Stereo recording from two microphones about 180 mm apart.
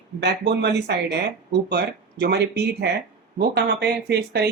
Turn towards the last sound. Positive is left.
turn(degrees=-65)  # may be behind; listen again after turning